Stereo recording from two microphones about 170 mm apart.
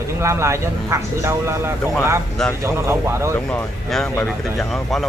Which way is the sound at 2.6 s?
15° right (ahead or behind).